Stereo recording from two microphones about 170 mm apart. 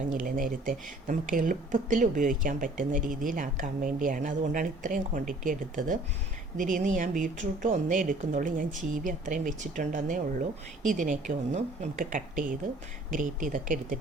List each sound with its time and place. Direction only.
0.1 s speech: 55° right (ahead or behind)